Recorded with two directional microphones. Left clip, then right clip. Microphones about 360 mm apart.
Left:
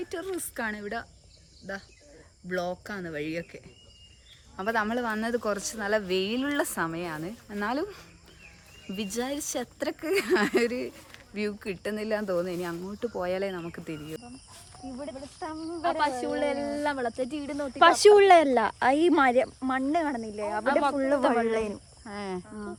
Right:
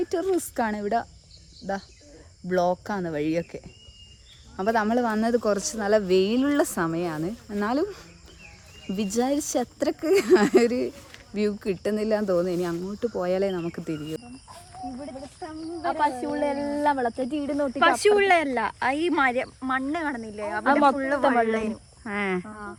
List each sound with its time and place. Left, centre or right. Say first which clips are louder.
0.0 s speech: right 9 dB; centre
2.5 s speech: right 8 dB; centre
15.4 s speech: even; centre
15.8 s speech: right 2 dB; centre
16.8 s speech: right 8 dB; centre
17.7 s speech: left 3 dB; left
22.1 s speech: right 8 dB; centre